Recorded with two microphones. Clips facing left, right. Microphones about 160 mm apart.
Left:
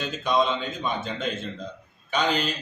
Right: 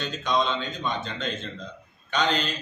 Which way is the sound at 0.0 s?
10° left (ahead or behind).